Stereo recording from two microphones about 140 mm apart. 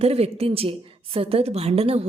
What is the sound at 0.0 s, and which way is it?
A woman's voice, 45° right (ahead or behind).